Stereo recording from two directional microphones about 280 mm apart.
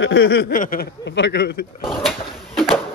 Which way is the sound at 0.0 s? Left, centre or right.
Left.